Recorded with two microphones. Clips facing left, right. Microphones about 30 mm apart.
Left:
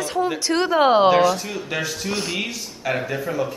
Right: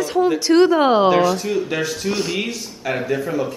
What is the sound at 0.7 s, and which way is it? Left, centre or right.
A woman's voice, centre.